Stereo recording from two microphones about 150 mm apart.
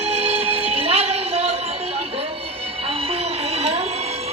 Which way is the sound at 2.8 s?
40° right (ahead or behind).